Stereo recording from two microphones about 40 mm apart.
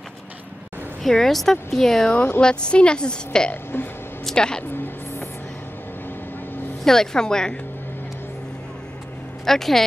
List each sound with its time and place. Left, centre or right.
1.0 s speech: centre
2.4 s a woman's voice: left
3.7 s speech: left
4.4 s a woman's voice: left
6.8 s speech: centre
9.5 s speech: centre